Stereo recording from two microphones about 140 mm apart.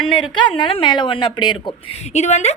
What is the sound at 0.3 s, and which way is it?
Speech, 35° left (ahead or behind).